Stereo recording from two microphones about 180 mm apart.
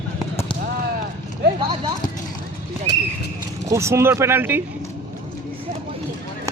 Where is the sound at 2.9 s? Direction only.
70° left (ahead or behind).